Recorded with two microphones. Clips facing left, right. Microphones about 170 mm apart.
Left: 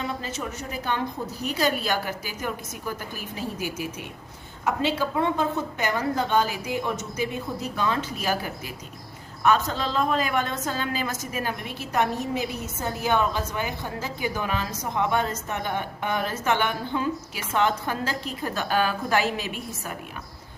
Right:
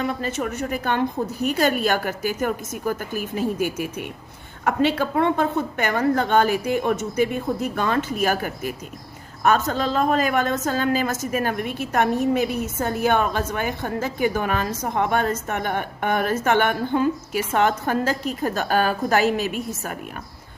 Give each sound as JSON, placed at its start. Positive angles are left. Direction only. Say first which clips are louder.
{"t": 0.0, "sound": "a woman's voice", "louder": "right 6 dB", "side_deg": -55}